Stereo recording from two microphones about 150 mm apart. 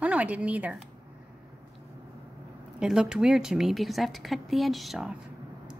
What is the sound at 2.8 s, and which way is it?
A woman's voice, 5° right (ahead or behind).